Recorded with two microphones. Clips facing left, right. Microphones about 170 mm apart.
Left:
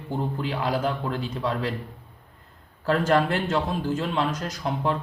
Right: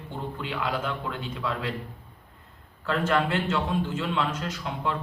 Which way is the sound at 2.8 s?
40° left (ahead or behind).